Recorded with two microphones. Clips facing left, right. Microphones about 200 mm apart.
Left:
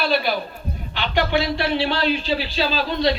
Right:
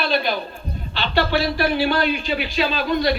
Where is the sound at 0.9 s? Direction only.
15° left (ahead or behind).